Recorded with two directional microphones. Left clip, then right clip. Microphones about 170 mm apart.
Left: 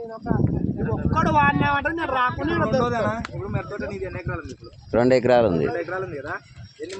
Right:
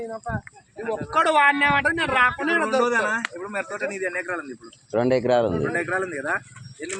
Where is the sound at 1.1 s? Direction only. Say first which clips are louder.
Right 2 dB; 25° right (ahead or behind).